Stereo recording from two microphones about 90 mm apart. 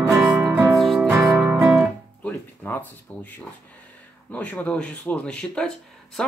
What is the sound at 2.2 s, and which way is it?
Music, 20° left (ahead or behind).